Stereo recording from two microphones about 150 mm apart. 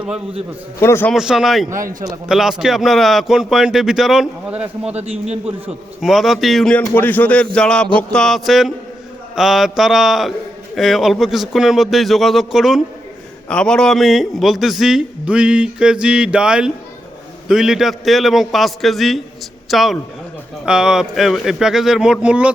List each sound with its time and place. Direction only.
0.8 s a man's voice: 15° left (ahead or behind)
1.1 s a man's voice: 5° right (ahead or behind)
1.8 s a man's voice: 60° right (ahead or behind)
2.0 s a man's voice: 5° right (ahead or behind)
5.1 s a man's voice: 45° right (ahead or behind)
5.6 s a man's voice: centre (ahead or behind)